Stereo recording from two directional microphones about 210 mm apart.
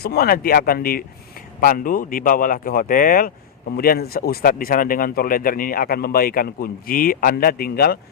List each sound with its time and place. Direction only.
0.0 s speech: 50° left (ahead or behind)